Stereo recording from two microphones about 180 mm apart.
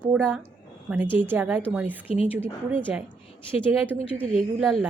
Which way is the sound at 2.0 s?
30° left (ahead or behind).